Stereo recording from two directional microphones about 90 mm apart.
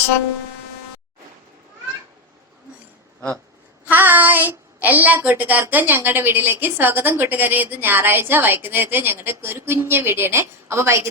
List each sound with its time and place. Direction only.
3.8 s a woman's voice: 20° right (ahead or behind)